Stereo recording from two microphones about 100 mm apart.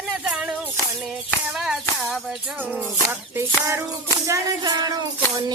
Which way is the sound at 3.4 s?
30° right (ahead or behind).